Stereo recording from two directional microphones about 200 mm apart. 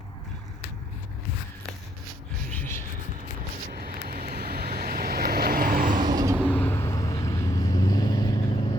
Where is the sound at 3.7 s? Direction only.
50° right (ahead or behind).